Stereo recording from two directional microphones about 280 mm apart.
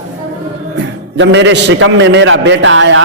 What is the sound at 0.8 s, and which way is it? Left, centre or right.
A man's voice, right.